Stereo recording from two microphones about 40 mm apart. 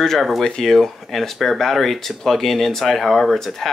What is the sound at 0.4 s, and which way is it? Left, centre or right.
Speech, centre.